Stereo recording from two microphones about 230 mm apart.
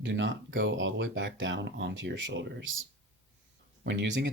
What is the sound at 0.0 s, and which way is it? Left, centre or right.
Speech, right.